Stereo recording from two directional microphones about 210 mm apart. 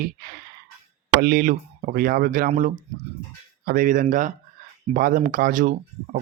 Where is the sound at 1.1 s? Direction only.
45° right (ahead or behind).